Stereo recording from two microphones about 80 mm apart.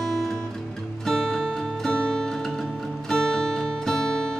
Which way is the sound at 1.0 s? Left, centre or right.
Centre.